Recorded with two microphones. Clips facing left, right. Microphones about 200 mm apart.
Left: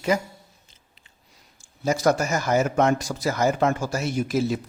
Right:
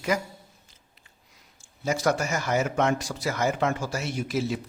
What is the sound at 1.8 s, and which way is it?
Speech, 40° left (ahead or behind).